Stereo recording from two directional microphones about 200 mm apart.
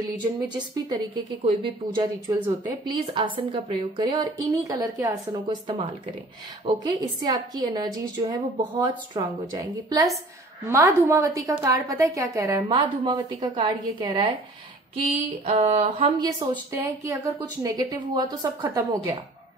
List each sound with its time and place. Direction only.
0.5 s a woman's voice: 20° right (ahead or behind)
15.4 s a sound: 30° right (ahead or behind)
16.0 s a woman's voice: 20° right (ahead or behind)